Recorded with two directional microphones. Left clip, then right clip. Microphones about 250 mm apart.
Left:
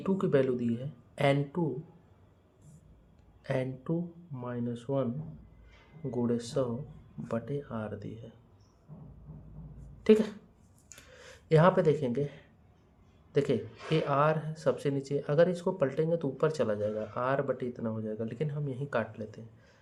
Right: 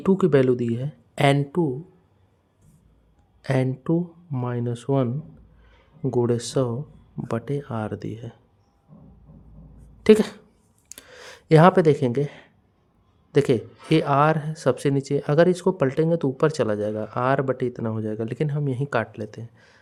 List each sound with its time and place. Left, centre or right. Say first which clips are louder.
0.0 s speech: right 9 dB; right
3.4 s speech: right 9 dB; right
6.1 s speech: right 10 dB; right
10.0 s speech: right 8 dB; right
10.8 s a sound: right 9 dB; right
13.3 s speech: right 9 dB; right